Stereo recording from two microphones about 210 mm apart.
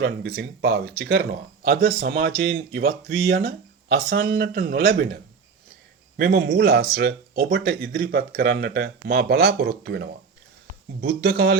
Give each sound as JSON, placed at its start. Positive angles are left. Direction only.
{"t": 0.0, "sound": "speech", "side_deg": -50}
{"t": 6.1, "sound": "speech", "side_deg": -45}